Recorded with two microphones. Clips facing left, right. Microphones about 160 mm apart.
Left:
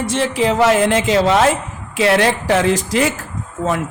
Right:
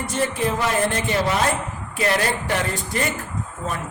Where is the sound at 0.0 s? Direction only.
90° left.